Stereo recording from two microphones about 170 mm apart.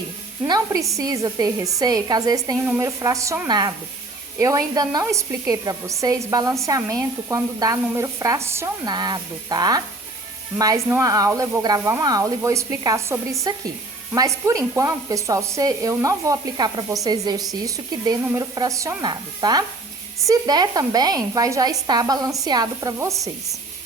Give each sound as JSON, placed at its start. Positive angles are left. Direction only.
{"t": 0.4, "sound": "a woman's voice", "side_deg": -20}